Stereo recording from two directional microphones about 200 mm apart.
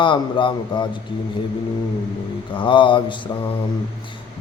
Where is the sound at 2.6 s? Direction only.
25° left (ahead or behind).